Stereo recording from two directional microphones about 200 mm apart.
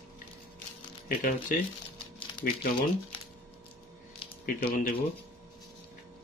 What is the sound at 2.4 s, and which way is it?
Speech, 50° left (ahead or behind).